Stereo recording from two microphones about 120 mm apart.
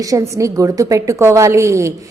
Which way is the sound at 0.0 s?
25° right (ahead or behind).